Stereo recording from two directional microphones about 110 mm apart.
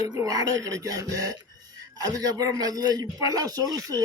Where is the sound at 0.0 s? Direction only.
35° right (ahead or behind).